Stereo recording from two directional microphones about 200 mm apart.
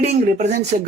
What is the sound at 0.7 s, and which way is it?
Speech, 45° right (ahead or behind).